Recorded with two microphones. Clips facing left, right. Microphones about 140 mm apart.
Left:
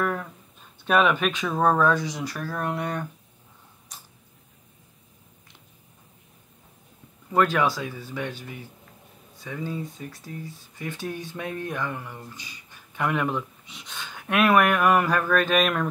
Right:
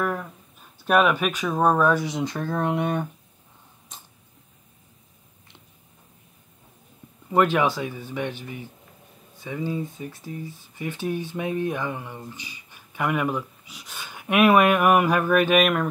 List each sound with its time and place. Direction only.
0.0 s speech: 5° right (ahead or behind)
7.2 s speech: 15° right (ahead or behind)